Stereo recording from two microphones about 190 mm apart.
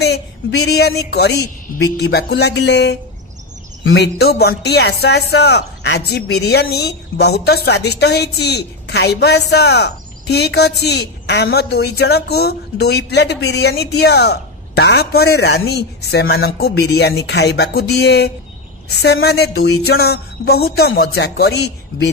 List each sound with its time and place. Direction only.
0.0 s a man's voice: 60° left (ahead or behind)